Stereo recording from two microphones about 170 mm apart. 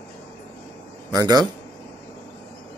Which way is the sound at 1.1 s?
20° right (ahead or behind).